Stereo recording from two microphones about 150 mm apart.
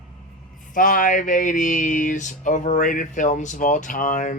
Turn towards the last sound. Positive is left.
turn(degrees=60)  # may be behind; listen again after turning